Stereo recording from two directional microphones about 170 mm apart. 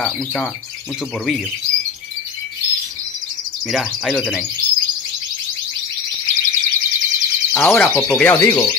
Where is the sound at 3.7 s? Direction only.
Centre (ahead or behind).